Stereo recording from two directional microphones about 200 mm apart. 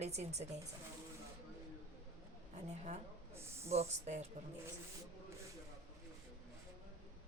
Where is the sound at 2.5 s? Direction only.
35° right (ahead or behind).